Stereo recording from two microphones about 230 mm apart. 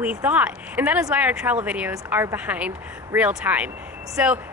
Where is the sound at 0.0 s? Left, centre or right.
Centre.